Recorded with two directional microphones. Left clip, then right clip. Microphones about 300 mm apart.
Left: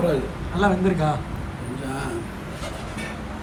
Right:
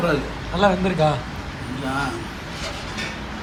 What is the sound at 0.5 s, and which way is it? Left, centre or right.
Speech, centre.